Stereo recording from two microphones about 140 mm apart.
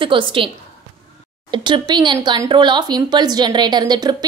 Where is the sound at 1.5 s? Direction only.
35° right (ahead or behind).